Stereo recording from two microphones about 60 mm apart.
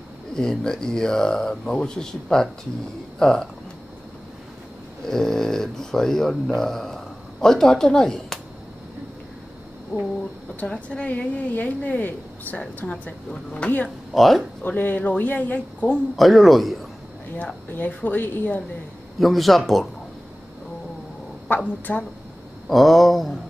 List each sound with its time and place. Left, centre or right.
0.4 s speech: centre
5.1 s speech: centre
10.5 s a woman's voice: left
13.8 s speech: centre
14.6 s a woman's voice: left
16.2 s speech: centre
17.7 s a woman's voice: left
19.1 s speech: centre
21.5 s a woman's voice: left
21.9 s speech: centre
22.7 s speech: centre